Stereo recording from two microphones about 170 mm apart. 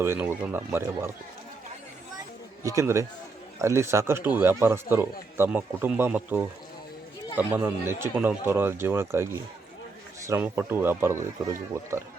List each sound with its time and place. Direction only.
0.0 s speech: 15° right (ahead or behind)
2.6 s speech: 20° right (ahead or behind)